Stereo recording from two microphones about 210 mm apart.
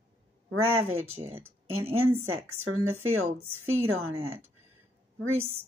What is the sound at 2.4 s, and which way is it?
Speech, 80° right.